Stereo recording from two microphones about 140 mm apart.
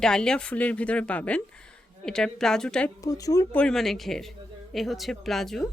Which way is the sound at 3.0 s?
25° left (ahead or behind).